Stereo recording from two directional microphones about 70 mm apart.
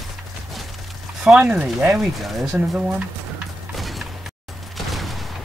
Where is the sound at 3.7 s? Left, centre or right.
Centre.